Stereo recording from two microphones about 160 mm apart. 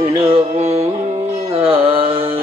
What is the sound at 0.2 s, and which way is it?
Music, 40° right (ahead or behind).